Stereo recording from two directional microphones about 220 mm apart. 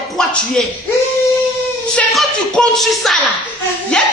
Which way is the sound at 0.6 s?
5° left (ahead or behind).